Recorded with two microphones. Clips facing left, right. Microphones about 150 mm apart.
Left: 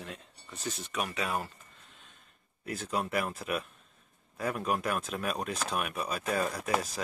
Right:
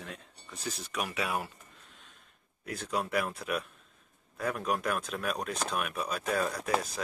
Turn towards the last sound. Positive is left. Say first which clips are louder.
# even
turn(degrees=0)  # may be behind; listen again after turning